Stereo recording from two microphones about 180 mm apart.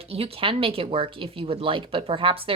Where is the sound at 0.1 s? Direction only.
30° right (ahead or behind).